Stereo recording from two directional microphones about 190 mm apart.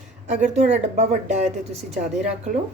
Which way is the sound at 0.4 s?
35° right (ahead or behind).